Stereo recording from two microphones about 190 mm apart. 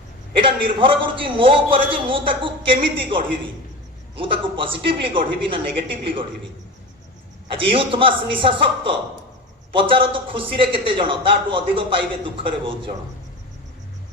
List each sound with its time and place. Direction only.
0.3 s a man's voice: 25° right (ahead or behind)
7.5 s a man's voice: 30° right (ahead or behind)